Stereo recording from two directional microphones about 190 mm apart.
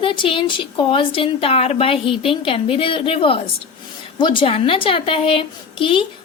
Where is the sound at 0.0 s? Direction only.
25° left (ahead or behind).